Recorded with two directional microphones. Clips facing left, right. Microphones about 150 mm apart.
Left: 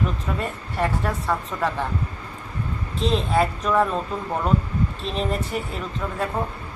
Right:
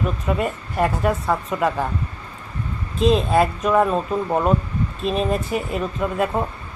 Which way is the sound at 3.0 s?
15° right (ahead or behind).